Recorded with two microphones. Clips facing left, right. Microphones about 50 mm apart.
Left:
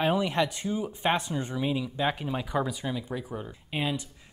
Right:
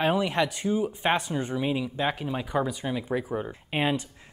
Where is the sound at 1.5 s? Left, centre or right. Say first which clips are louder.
Right 1 dB; centre.